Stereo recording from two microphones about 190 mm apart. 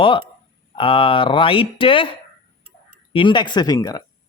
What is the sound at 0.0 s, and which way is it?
Speech, 25° left (ahead or behind).